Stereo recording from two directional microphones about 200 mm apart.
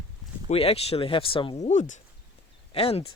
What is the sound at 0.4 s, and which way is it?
Speech, 30° left (ahead or behind).